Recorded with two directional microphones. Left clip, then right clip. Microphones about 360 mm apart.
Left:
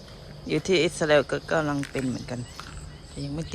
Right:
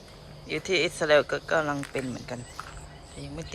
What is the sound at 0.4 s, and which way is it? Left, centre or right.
Speech, centre.